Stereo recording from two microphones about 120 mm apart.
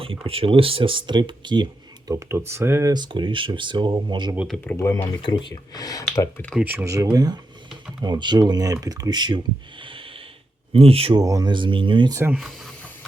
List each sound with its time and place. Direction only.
0.0 s speech: 50° right (ahead or behind)
2.0 s speech: 20° right (ahead or behind)
2.9 s speech: 40° right (ahead or behind)
4.4 s speech: 10° left (ahead or behind)
4.8 s speech: 25° left (ahead or behind)
5.2 s speech: 40° left (ahead or behind)
6.6 s speech: 15° right (ahead or behind)
6.8 s speech: 25° right (ahead or behind)
9.8 s snort: 45° right (ahead or behind)
10.8 s speech: 55° right (ahead or behind)
11.1 s speech: 30° right (ahead or behind)